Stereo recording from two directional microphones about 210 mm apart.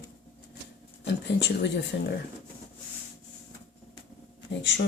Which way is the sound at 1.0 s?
55° left (ahead or behind).